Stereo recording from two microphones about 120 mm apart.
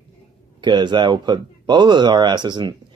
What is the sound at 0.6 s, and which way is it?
Speech, 40° right (ahead or behind).